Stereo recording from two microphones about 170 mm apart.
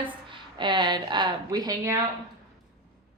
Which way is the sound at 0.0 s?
30° right (ahead or behind).